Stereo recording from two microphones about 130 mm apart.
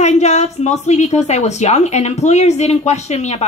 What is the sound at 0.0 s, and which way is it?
A woman's voice, 60° left (ahead or behind).